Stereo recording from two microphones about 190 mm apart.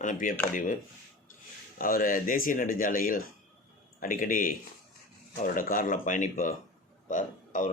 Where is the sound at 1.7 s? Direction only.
45° left (ahead or behind).